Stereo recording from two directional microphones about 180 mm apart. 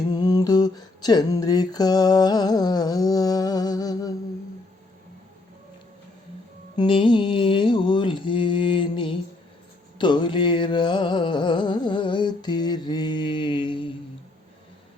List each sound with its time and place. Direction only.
0.1 s a sound: 20° left (ahead or behind)
6.7 s mantra: 30° left (ahead or behind)
10.0 s music: 25° left (ahead or behind)